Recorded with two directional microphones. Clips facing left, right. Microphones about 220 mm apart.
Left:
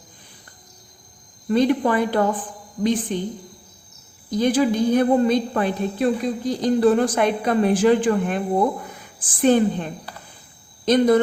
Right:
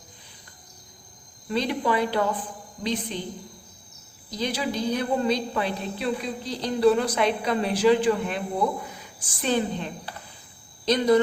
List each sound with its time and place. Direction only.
1.5 s a woman's voice: 50° left (ahead or behind)
4.3 s a woman's voice: 50° left (ahead or behind)